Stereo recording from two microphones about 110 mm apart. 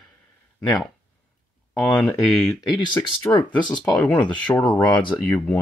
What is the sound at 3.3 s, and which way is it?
Speech, 20° left (ahead or behind).